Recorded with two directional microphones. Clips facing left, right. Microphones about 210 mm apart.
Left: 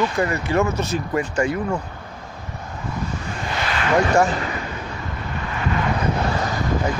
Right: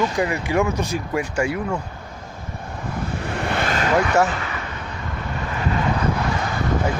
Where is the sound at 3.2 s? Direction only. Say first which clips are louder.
Right 4 dB; 60° right (ahead or behind); by 3.9 s 45° right (ahead or behind).